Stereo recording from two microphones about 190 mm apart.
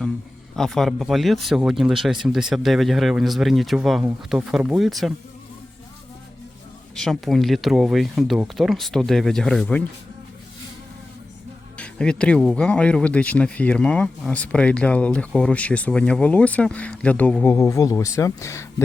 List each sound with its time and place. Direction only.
0.5 s speech: centre (ahead or behind)
6.9 s speech: centre (ahead or behind)
11.8 s speech: 5° left (ahead or behind)